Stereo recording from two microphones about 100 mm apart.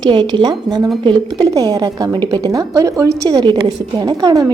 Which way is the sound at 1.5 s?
35° right (ahead or behind).